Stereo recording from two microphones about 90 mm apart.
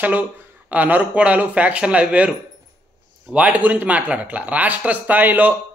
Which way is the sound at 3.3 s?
15° right (ahead or behind).